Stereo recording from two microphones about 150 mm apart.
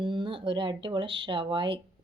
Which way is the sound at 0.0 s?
35° right (ahead or behind).